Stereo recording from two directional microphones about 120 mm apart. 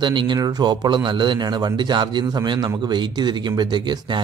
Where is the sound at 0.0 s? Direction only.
40° right (ahead or behind).